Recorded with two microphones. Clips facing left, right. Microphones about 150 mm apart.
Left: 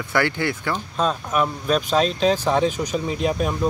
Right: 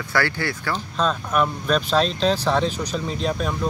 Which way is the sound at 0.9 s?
5° left (ahead or behind).